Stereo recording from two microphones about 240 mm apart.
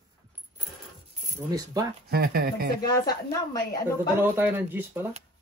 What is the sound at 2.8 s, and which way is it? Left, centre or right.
Speech, centre.